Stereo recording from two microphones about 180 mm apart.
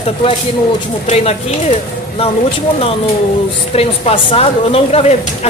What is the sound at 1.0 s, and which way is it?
Speech, 40° left (ahead or behind).